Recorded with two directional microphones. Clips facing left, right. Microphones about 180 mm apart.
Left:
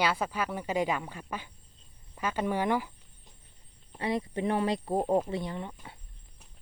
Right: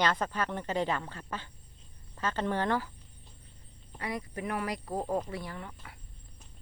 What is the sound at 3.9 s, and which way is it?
Speech, 25° left (ahead or behind).